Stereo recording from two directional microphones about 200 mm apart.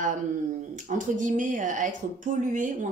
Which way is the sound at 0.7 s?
40° right (ahead or behind).